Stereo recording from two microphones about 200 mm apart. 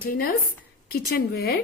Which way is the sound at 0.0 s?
45° left (ahead or behind).